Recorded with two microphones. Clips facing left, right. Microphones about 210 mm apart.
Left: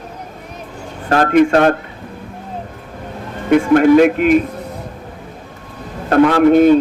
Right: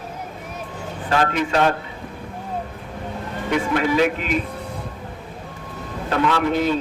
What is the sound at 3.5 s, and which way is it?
Speech, 50° left (ahead or behind).